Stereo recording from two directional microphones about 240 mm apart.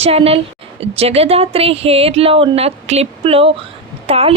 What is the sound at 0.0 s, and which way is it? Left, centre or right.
Speech, right.